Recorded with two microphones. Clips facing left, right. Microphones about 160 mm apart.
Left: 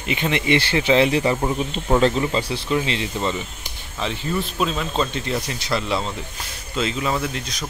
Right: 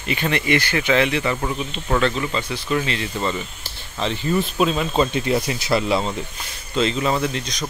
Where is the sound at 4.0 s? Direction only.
Centre (ahead or behind).